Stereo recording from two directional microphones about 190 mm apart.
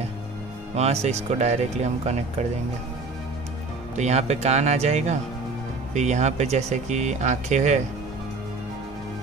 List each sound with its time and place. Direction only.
0.7 s speech: 35° right (ahead or behind)
3.9 s speech: 35° right (ahead or behind)